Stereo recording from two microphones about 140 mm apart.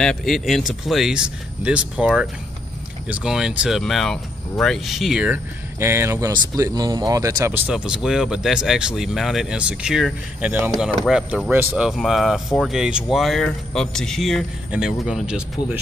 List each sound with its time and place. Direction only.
0.0 s speech: 5° left (ahead or behind)
3.1 s speech: 5° right (ahead or behind)
5.8 s speech: 20° right (ahead or behind)
7.6 s speech: 5° right (ahead or behind)